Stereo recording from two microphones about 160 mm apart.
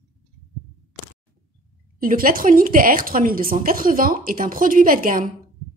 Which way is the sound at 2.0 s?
60° right (ahead or behind).